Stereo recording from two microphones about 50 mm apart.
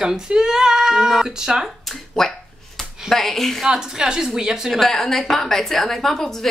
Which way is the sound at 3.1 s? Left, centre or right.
Centre.